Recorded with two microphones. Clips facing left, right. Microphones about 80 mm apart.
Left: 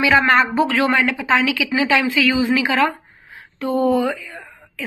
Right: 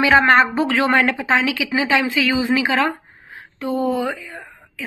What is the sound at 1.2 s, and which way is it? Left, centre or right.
Speech, right.